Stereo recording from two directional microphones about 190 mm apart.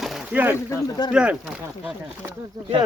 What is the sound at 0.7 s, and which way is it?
Speech, 20° left (ahead or behind).